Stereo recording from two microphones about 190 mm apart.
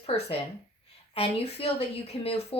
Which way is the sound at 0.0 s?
30° left (ahead or behind).